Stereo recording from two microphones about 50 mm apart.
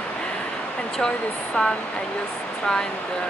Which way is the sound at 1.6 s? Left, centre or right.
Centre.